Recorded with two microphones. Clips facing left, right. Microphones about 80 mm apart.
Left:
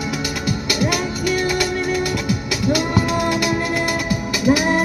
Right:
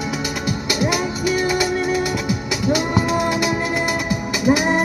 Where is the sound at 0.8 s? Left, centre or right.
Centre.